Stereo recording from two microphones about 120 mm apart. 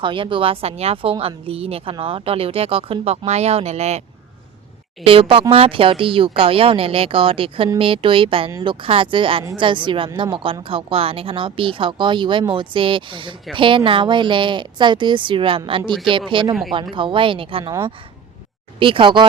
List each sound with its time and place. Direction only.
0.0 s speech: 45° right (ahead or behind); by 4.0 s 65° right (ahead or behind)
5.0 s speech: 50° right (ahead or behind)